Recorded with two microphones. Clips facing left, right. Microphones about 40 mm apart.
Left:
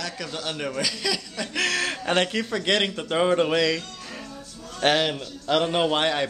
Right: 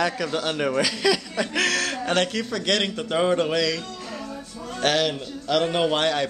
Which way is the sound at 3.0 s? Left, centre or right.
Centre.